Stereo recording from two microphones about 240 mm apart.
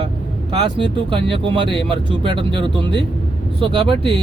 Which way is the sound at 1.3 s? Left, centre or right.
Right.